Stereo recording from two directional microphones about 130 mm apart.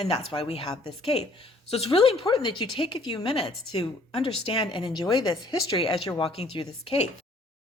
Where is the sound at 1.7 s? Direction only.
45° left (ahead or behind).